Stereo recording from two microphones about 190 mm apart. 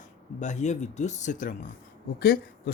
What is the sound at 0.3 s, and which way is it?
Speech, 40° left (ahead or behind).